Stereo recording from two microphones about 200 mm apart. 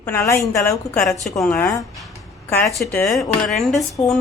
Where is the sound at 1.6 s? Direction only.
15° left (ahead or behind).